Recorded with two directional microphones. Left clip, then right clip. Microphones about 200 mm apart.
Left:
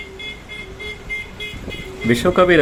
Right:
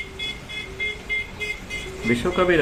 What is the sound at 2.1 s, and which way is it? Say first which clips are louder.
Speech: left 6 dB; 30° left (ahead or behind).